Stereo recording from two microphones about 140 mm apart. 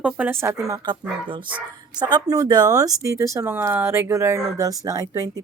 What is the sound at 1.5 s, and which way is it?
Speech, 30° right (ahead or behind).